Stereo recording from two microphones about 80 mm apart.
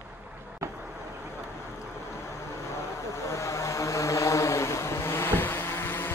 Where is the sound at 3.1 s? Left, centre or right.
Left.